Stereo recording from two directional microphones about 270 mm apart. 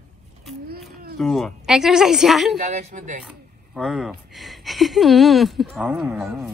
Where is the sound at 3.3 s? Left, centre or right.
Centre.